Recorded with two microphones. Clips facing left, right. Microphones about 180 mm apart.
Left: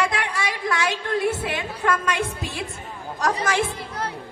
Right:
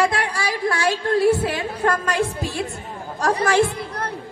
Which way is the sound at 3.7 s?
60° right (ahead or behind).